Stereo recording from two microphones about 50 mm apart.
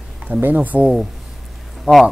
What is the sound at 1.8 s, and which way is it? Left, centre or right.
Speech, centre.